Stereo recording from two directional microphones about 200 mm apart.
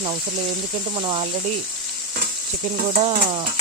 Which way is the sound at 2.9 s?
35° right (ahead or behind).